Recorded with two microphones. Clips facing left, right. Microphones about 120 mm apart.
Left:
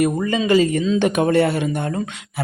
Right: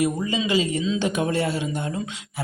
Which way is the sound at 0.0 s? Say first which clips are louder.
Left 4 dB; 55° left (ahead or behind).